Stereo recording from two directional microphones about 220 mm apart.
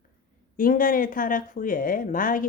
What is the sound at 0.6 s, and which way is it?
A woman's voice, 40° left (ahead or behind).